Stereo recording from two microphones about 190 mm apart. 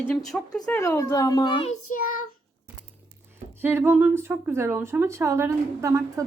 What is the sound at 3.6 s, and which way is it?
Speech, 10° right (ahead or behind).